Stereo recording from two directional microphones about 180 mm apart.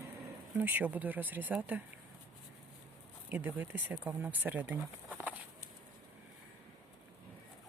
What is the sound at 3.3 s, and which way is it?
Speech, 10° right (ahead or behind).